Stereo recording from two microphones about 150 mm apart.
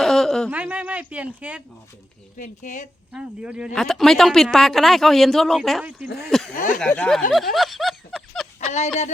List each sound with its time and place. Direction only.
0.0 s a sound: centre (ahead or behind)
0.5 s speech: 10° right (ahead or behind)
2.4 s speech: 55° left (ahead or behind)
3.1 s speech: 5° right (ahead or behind)
6.1 s speech: 90° left
6.7 s speech: 10° left (ahead or behind)
8.6 s speech: 50° left (ahead or behind)